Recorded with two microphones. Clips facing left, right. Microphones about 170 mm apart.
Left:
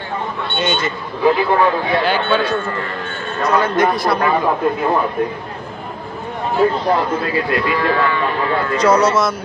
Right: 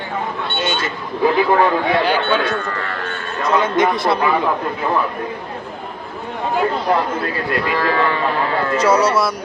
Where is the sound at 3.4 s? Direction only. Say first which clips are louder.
Left 1 dB; 20° right (ahead or behind).